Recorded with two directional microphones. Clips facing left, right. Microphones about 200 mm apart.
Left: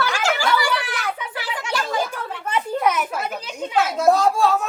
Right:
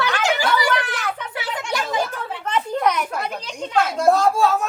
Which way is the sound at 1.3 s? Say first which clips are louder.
Right 1 dB; 25° right (ahead or behind).